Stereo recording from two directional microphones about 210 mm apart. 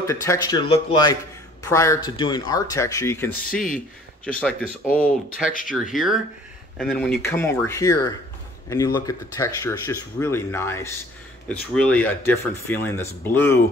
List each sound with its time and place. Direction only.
0.0 s speech: 15° left (ahead or behind)
3.4 s speech: 40° left (ahead or behind)
4.2 s speech: 5° left (ahead or behind)
7.2 s speech: 10° left (ahead or behind)